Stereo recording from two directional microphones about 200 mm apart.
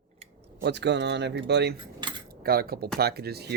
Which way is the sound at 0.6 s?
60° right (ahead or behind).